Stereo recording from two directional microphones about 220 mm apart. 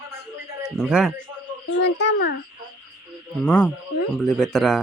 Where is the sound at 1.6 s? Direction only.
55° left (ahead or behind).